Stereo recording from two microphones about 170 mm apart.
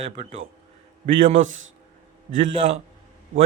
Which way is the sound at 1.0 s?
45° right (ahead or behind).